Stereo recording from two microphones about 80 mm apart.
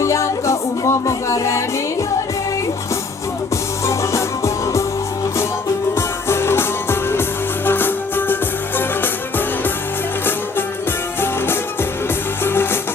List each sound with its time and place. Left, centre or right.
0.0 s music: left
3.8 s music: left
5.9 s music: left
11.2 s music: left